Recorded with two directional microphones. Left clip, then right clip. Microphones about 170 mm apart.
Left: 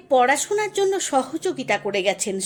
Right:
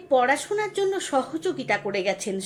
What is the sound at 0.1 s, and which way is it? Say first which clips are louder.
A woman's voice: left 3 dB; 40° left (ahead or behind).